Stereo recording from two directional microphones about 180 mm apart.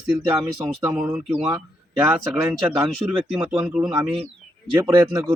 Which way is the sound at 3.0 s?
5° right (ahead or behind).